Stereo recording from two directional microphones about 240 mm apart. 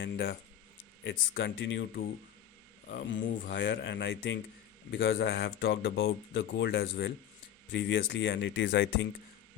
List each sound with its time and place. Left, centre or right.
0.0 s speech: left
3.2 s speech: left
3.5 s speech: left